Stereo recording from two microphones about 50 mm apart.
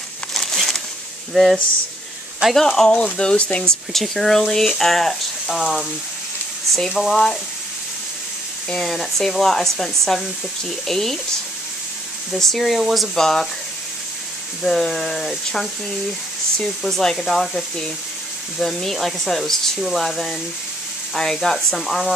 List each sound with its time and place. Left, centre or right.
0.3 s a sound: centre
1.3 s speech: centre
2.9 s speech: left
3.6 s speech: centre
8.6 s speech: centre
12.3 s speech: centre
14.6 s speech: centre